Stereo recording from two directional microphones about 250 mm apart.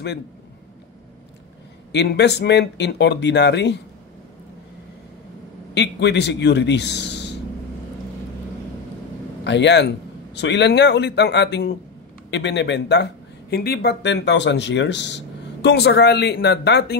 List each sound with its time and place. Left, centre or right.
1.9 s speech: left
5.8 s speech: left
9.4 s a man's voice: left